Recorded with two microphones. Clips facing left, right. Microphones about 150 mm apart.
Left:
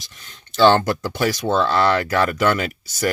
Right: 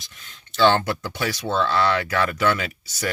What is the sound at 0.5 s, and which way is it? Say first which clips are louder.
Speech: left 4 dB; 40° left (ahead or behind).